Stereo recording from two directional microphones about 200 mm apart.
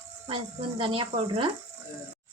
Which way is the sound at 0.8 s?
25° right (ahead or behind).